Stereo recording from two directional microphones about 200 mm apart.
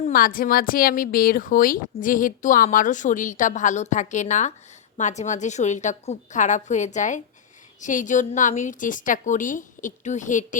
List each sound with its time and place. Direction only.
0.0 s a woman's voice: 45° left (ahead or behind)